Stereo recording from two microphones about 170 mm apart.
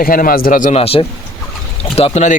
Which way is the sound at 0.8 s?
35° left (ahead or behind).